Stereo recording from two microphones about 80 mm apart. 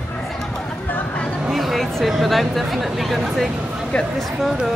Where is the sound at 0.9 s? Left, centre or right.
Centre.